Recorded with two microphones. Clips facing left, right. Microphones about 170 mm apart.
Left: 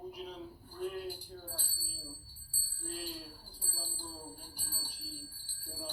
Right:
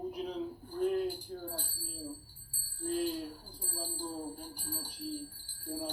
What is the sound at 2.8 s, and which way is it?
Jingle bell, 50° right (ahead or behind).